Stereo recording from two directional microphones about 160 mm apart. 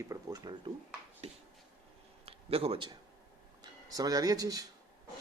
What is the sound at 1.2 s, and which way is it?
Speech, 40° right (ahead or behind).